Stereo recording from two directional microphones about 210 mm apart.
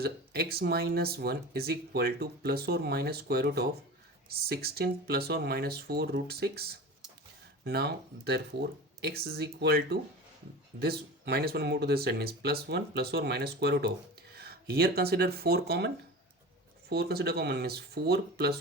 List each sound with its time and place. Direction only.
0.0 s speech: 50° right (ahead or behind)
16.9 s speech: 50° right (ahead or behind)